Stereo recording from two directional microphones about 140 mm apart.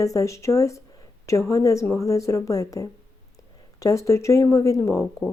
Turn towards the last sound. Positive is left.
turn(degrees=25)  # may be behind; listen again after turning